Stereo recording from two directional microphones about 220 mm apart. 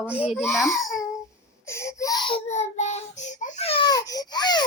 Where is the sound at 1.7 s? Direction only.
15° left (ahead or behind).